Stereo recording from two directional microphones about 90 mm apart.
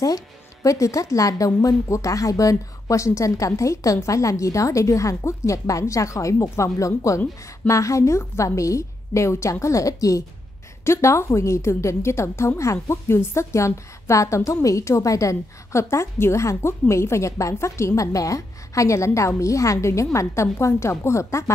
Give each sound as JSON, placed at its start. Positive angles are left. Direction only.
{"t": 0.0, "sound": "speech", "side_deg": 40}